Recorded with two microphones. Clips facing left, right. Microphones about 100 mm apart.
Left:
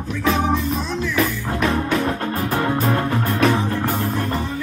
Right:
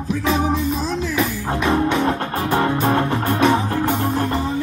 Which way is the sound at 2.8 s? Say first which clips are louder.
Right 2 dB; 30° right (ahead or behind).